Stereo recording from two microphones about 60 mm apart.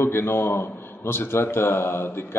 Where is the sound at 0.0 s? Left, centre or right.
Left.